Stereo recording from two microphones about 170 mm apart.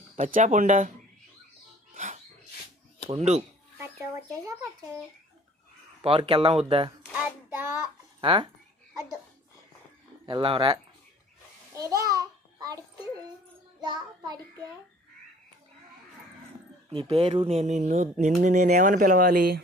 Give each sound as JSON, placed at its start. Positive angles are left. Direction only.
{"t": 0.2, "sound": "speech", "side_deg": -50}
{"t": 1.9, "sound": "a sound", "side_deg": -50}
{"t": 3.1, "sound": "speech", "side_deg": -40}
{"t": 4.3, "sound": "a child's voice", "side_deg": -20}
{"t": 6.0, "sound": "speech", "side_deg": -30}
{"t": 7.1, "sound": "a child's voice", "side_deg": -10}
{"t": 8.2, "sound": "a child's voice", "side_deg": -30}
{"t": 10.2, "sound": "a child's voice", "side_deg": -30}
{"t": 11.7, "sound": "babbling", "side_deg": -20}
{"t": 13.8, "sound": "a child's voice", "side_deg": -25}
{"t": 16.9, "sound": "speech", "side_deg": -30}